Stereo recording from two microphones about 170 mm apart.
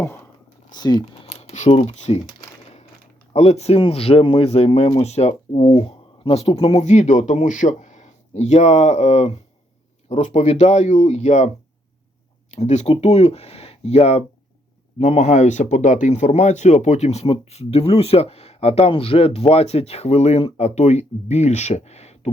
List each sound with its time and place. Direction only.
0.7 s speech: 25° left (ahead or behind)
1.4 s speech: 40° left (ahead or behind)
3.3 s speech: 40° left (ahead or behind)
12.5 s speech: 40° left (ahead or behind)